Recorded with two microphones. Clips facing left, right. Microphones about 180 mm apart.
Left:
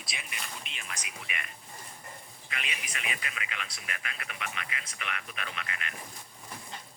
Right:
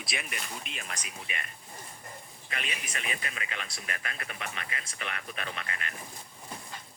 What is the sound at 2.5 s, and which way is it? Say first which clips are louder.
Speech: right 2 dB; 40° right (ahead or behind).